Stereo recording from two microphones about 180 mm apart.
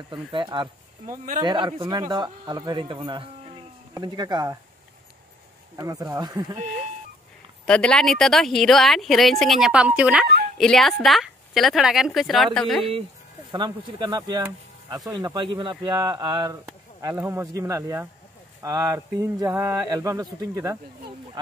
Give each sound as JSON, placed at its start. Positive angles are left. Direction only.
{"t": 0.1, "sound": "speech", "side_deg": -25}
{"t": 1.0, "sound": "speech", "side_deg": -40}
{"t": 1.4, "sound": "speech", "side_deg": -25}
{"t": 5.8, "sound": "speech", "side_deg": -20}
{"t": 7.6, "sound": "speech", "side_deg": 5}
{"t": 13.5, "sound": "speech", "side_deg": -25}